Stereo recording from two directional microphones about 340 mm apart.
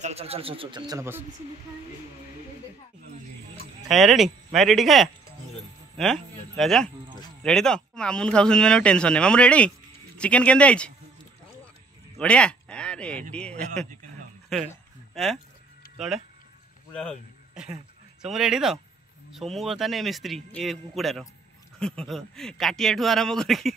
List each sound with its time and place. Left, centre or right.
0.0 s speech: centre
3.9 s speech: centre
12.2 s speech: centre
14.5 s a sound: centre
16.9 s a man's voice: centre